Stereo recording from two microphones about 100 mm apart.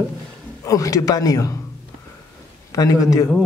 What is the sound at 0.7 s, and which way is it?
Speech, 35° left (ahead or behind).